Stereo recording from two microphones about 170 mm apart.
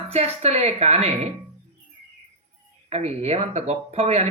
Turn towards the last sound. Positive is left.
turn(degrees=-40)  # may be behind; listen again after turning